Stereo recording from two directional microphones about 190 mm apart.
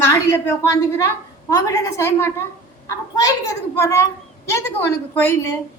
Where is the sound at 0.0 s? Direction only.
15° left (ahead or behind).